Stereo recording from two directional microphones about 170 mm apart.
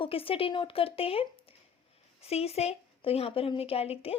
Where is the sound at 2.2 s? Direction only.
35° left (ahead or behind).